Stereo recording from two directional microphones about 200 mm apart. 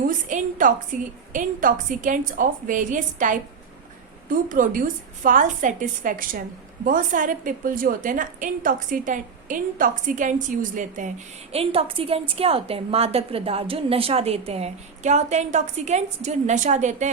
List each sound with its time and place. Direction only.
0.3 s a woman's voice: 40° right (ahead or behind)
11.5 s a woman's voice: 30° right (ahead or behind)